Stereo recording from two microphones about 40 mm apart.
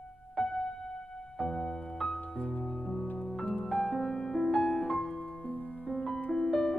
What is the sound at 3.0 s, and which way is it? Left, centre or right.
Music, left.